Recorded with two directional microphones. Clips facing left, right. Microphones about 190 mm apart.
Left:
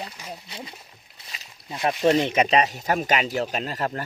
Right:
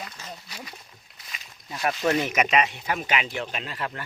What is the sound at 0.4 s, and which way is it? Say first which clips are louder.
Speech: left 3 dB; 25° left (ahead or behind).